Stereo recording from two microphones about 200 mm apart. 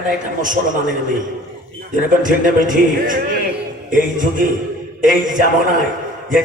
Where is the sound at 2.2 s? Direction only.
40° right (ahead or behind).